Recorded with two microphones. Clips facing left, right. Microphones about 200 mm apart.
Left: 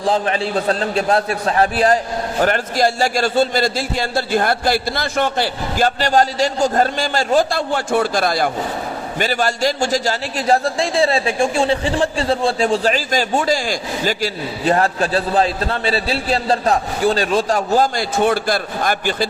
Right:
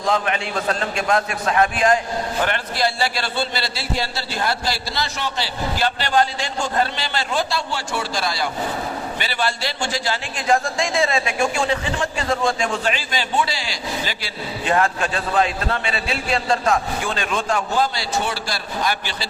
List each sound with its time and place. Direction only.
0.0 s a man's voice: 35° left (ahead or behind); by 19.3 s 50° left (ahead or behind)